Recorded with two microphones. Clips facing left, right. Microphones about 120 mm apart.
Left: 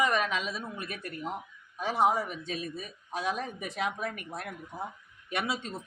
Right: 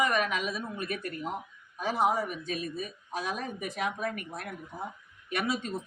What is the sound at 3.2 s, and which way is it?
Speech, 25° left (ahead or behind).